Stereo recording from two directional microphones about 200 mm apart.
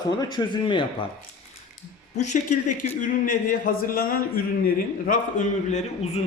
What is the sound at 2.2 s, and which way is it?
Speech, 40° left (ahead or behind).